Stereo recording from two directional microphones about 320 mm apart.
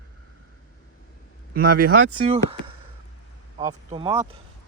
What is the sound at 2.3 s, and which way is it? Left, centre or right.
Chop, centre.